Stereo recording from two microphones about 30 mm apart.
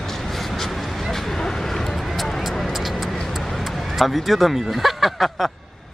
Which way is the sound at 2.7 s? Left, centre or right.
Centre.